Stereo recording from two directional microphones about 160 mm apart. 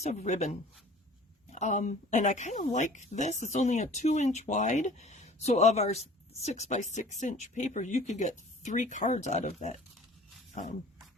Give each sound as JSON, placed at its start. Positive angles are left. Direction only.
{"t": 0.0, "sound": "speech", "side_deg": 45}
{"t": 10.5, "sound": "dog", "side_deg": 45}